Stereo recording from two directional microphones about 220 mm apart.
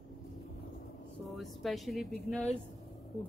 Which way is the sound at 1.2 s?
Centre (ahead or behind).